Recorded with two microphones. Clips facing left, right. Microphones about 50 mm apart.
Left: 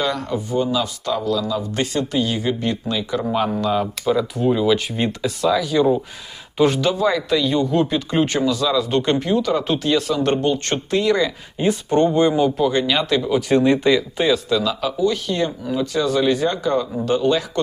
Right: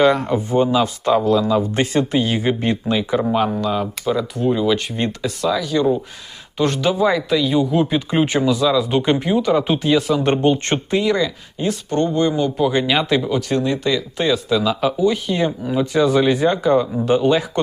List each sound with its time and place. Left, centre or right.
0.0 s speech: right
3.2 s speech: centre
6.8 s speech: centre
10.2 s speech: right
10.9 s speech: centre
11.6 s speech: centre
12.5 s speech: centre
13.6 s speech: left
13.9 s speech: centre